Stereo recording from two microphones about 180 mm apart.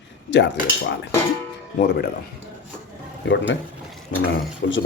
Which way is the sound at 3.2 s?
80° left.